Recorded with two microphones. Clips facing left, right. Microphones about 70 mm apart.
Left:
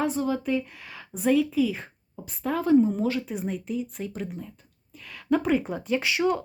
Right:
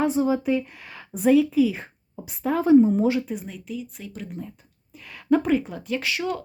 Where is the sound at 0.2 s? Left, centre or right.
Centre.